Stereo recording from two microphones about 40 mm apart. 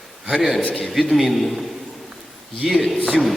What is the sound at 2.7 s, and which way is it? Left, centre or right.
Speech, centre.